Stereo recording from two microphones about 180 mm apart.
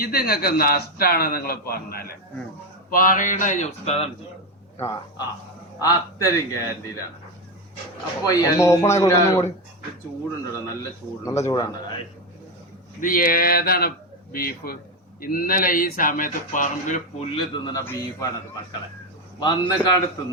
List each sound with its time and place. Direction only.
0.0 s a man's voice: 55° left (ahead or behind); by 4.1 s 35° left (ahead or behind)
4.8 s a man's voice: 20° left (ahead or behind)
8.2 s speech: 20° left (ahead or behind)
11.3 s a man's voice: 15° left (ahead or behind)
13.0 s a man's voice: 50° left (ahead or behind)
17.3 s speech: 20° left (ahead or behind)
19.4 s speech: 25° left (ahead or behind)